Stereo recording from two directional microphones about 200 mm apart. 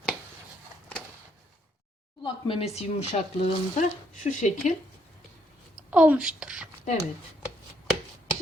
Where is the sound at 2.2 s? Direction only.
25° left (ahead or behind).